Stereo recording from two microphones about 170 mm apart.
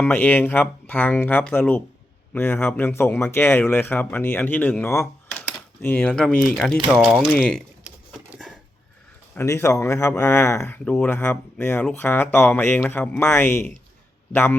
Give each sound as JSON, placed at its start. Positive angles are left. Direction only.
{"t": 0.0, "sound": "speech", "side_deg": 10}
{"t": 9.3, "sound": "speech", "side_deg": 15}